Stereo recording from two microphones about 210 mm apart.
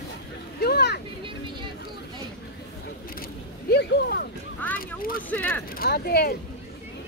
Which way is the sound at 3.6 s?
50° left (ahead or behind).